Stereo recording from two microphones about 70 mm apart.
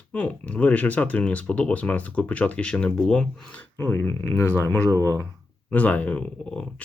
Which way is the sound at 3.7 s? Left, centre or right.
Left.